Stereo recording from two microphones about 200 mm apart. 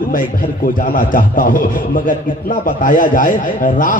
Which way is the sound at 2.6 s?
40° left (ahead or behind).